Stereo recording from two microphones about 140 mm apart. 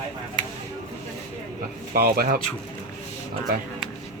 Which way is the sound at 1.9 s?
90° right.